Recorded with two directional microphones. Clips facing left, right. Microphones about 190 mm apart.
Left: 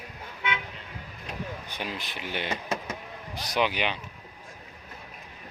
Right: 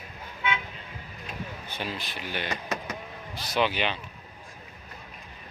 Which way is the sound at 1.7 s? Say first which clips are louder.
Right 1 dB; 15° left (ahead or behind).